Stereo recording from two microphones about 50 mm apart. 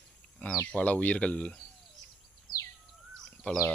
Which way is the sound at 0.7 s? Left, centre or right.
Left.